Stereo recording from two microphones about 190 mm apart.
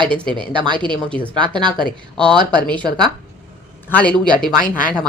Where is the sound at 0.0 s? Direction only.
5° left (ahead or behind).